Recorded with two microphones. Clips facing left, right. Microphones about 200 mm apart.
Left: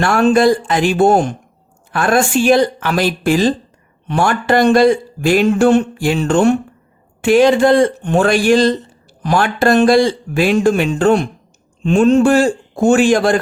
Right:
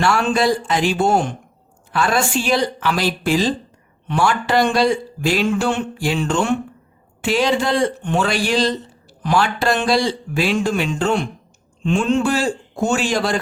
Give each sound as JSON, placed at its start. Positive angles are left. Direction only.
{"t": 0.0, "sound": "a man's voice", "side_deg": 50}